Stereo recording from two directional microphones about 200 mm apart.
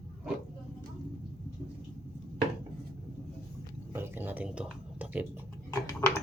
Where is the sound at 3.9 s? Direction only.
10° right (ahead or behind).